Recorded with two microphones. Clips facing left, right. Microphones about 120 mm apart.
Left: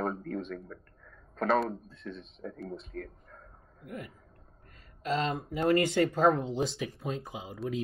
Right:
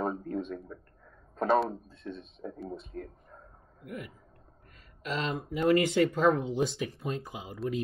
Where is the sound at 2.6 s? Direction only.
Centre (ahead or behind).